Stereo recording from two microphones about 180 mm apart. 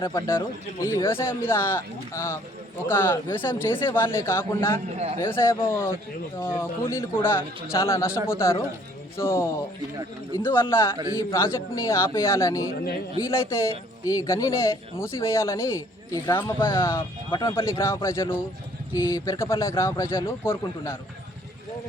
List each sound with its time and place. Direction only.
0.1 s speech: 15° left (ahead or behind)
4.9 s speech: 35° right (ahead or behind)
5.2 s speech: 15° left (ahead or behind)
17.0 s speech: 25° left (ahead or behind)
17.5 s speech: 15° left (ahead or behind)